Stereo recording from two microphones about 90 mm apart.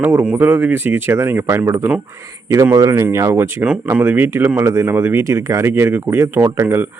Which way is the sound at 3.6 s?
15° right (ahead or behind).